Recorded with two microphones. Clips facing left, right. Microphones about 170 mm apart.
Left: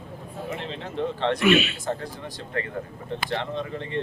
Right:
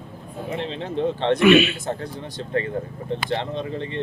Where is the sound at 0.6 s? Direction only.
25° right (ahead or behind).